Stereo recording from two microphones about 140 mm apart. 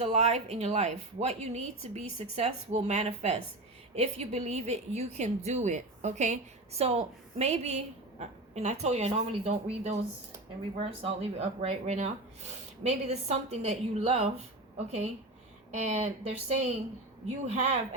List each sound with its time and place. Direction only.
0.0 s a woman's voice: 45° right (ahead or behind)
15.8 s a woman's voice: 55° right (ahead or behind)